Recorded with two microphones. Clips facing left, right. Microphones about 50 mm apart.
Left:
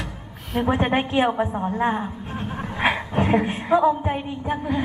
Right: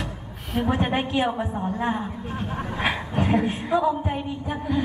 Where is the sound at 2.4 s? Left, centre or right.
Centre.